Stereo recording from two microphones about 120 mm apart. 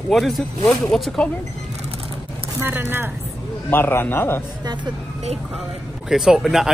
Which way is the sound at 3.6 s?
20° left (ahead or behind).